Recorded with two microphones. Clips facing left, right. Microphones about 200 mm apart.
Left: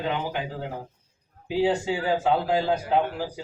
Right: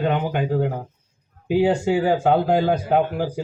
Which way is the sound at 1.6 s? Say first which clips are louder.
Right 4 dB; 50° right (ahead or behind).